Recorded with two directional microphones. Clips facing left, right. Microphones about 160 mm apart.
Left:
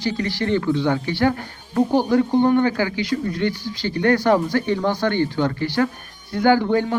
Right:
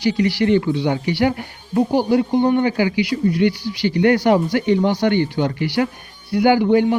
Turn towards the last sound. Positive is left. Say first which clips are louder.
# right 3 dB
turn(degrees=-15)  # may be behind; listen again after turning